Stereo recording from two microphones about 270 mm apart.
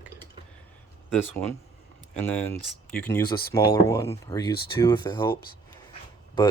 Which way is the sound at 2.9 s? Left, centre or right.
Centre.